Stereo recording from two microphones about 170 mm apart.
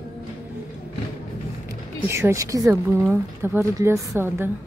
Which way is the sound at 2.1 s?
15° right (ahead or behind).